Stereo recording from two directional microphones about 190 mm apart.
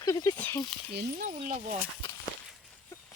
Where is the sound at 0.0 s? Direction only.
20° left (ahead or behind).